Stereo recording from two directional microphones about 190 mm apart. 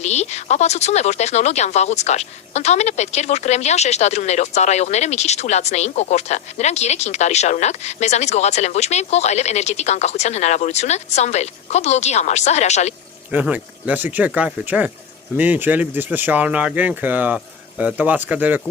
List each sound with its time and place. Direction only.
0.0 s speech: 35° left (ahead or behind)
13.3 s speech: 10° right (ahead or behind)